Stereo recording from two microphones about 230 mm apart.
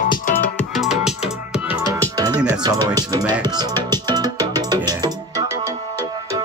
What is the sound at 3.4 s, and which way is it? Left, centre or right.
Music, centre.